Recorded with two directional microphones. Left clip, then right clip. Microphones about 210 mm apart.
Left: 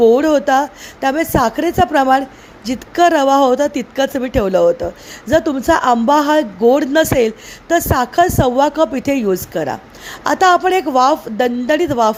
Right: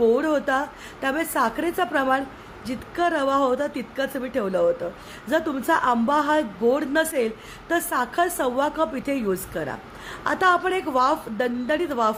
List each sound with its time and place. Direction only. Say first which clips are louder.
0.0 s speech: left 9 dB; 25° left (ahead or behind)